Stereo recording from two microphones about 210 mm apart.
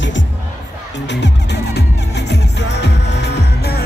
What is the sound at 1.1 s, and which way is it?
Music, 55° left (ahead or behind).